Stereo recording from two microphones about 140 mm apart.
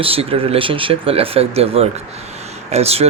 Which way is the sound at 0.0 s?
45° right (ahead or behind).